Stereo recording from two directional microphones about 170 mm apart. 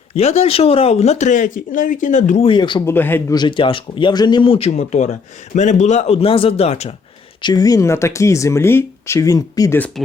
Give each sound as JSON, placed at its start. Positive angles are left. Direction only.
{"t": 0.1, "sound": "speech", "side_deg": 35}
{"t": 2.5, "sound": "speech", "side_deg": 30}
{"t": 2.8, "sound": "speech", "side_deg": 10}
{"t": 3.3, "sound": "speech", "side_deg": 30}
{"t": 7.4, "sound": "speech", "side_deg": 20}